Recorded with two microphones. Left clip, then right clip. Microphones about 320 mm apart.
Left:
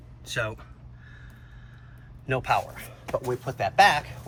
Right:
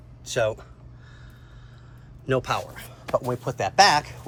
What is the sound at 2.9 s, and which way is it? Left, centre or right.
Speech, centre.